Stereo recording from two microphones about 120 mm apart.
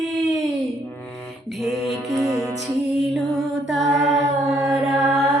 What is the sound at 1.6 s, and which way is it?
Mantra, centre (ahead or behind).